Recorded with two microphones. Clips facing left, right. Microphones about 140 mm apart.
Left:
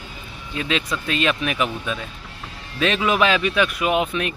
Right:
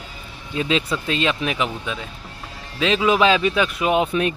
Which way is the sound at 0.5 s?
30° right (ahead or behind).